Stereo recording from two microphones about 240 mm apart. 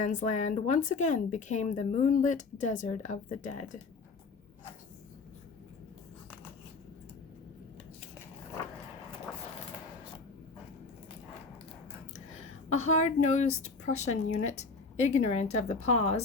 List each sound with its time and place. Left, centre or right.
0.0 s speech: left
12.9 s speech: left